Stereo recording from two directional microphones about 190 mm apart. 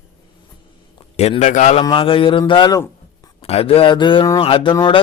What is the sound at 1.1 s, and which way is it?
Speech, 35° left (ahead or behind).